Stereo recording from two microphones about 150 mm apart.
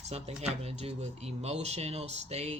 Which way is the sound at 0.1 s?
45° right (ahead or behind).